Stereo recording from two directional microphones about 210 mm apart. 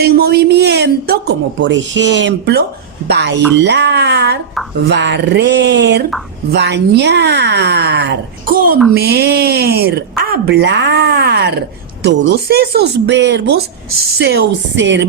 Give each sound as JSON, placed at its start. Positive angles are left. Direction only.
{"t": 0.0, "sound": "speech", "side_deg": -50}